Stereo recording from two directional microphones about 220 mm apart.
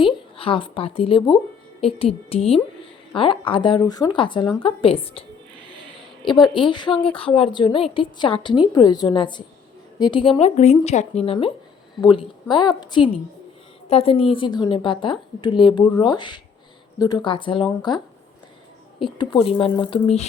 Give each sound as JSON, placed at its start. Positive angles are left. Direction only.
{"t": 0.0, "sound": "speech", "side_deg": 25}
{"t": 6.2, "sound": "speech", "side_deg": 20}